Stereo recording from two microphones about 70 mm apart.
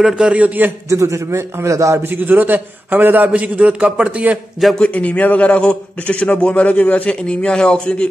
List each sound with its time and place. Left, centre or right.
0.0 s a man's voice: centre
0.8 s a man's voice: right
2.0 s a man's voice: right
4.7 s a man's voice: centre